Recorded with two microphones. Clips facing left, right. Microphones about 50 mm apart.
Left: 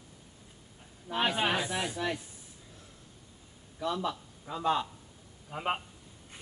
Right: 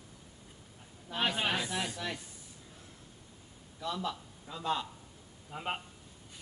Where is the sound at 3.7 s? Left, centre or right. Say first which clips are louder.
Left 4 dB; centre.